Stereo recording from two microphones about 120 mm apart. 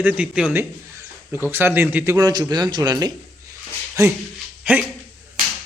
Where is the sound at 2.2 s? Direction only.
35° right (ahead or behind).